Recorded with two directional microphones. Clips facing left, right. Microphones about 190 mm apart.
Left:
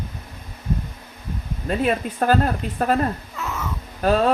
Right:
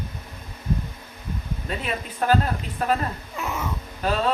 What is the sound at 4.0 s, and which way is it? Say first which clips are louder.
Speech: left 5 dB; 50° left (ahead or behind).